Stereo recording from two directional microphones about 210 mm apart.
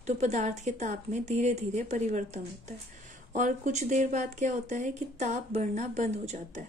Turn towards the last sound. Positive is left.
turn(degrees=-35)  # may be behind; listen again after turning